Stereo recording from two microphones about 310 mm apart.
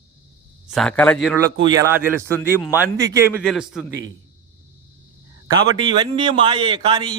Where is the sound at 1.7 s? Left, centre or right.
Centre.